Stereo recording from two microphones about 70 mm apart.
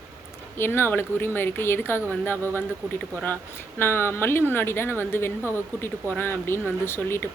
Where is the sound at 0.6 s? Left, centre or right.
Left.